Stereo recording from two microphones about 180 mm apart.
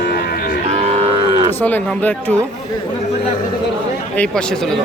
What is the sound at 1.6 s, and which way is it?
Speech, 10° left (ahead or behind).